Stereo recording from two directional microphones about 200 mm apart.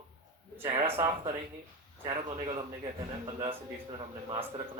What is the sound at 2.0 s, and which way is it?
Speech, 30° right (ahead or behind).